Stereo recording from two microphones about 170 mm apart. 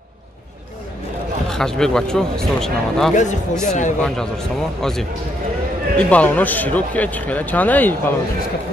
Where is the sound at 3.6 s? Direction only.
45° left (ahead or behind).